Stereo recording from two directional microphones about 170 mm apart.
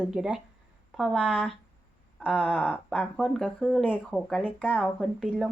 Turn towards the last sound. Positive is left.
turn(degrees=0)  # may be behind; listen again after turning